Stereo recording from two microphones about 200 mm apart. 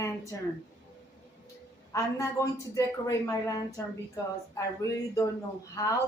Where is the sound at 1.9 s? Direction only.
15° left (ahead or behind).